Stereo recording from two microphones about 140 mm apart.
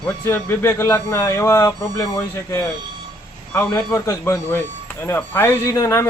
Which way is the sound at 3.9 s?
20° left (ahead or behind).